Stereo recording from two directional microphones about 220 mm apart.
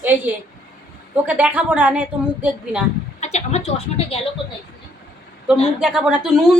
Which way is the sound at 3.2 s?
30° left (ahead or behind).